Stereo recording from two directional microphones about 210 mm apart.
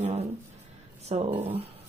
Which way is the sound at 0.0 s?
30° right (ahead or behind).